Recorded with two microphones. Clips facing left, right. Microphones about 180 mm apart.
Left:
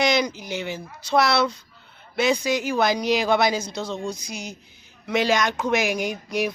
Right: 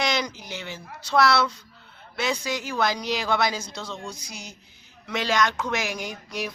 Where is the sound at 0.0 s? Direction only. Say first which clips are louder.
Left 5 dB; 15° left (ahead or behind).